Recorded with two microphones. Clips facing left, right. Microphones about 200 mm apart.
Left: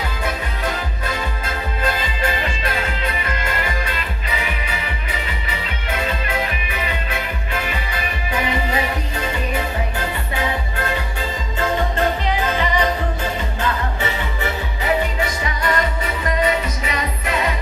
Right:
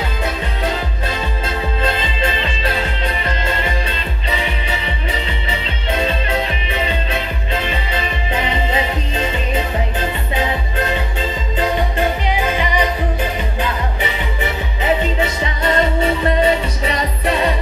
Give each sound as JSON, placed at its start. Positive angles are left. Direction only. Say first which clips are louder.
{"t": 1.0, "sound": "music", "louder": "right 1 dB", "side_deg": -25}